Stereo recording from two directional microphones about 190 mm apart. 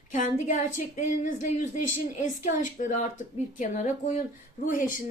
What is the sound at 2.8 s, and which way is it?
Speech, 45° left (ahead or behind).